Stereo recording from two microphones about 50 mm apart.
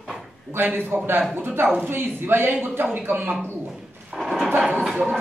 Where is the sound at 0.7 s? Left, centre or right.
Right.